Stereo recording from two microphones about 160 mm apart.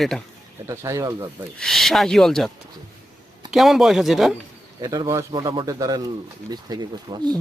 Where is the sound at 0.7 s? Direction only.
20° right (ahead or behind).